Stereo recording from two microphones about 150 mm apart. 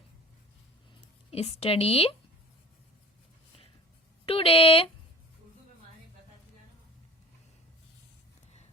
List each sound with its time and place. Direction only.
1.3 s a woman's voice: 40° left (ahead or behind)
4.3 s speech: 35° left (ahead or behind)